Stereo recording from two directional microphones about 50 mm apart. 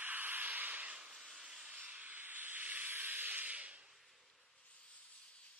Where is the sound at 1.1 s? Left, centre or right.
Centre.